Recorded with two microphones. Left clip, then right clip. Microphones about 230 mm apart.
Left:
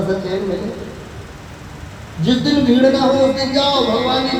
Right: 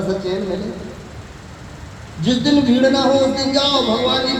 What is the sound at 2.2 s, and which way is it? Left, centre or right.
Speech, right.